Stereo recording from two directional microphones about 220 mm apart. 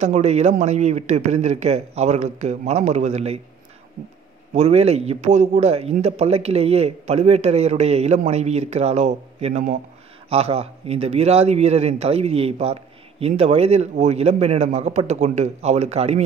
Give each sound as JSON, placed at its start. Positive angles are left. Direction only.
{"t": 0.0, "sound": "speech", "side_deg": -30}
{"t": 4.6, "sound": "a man's voice", "side_deg": -30}